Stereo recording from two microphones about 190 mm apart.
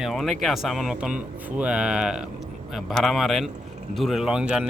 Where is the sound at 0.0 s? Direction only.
Centre (ahead or behind).